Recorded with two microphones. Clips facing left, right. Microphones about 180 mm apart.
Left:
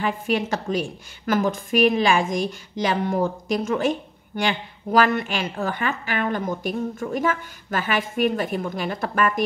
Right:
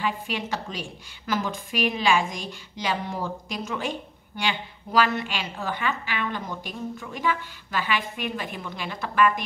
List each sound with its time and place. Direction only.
0.0 s a woman's voice: 45° left (ahead or behind)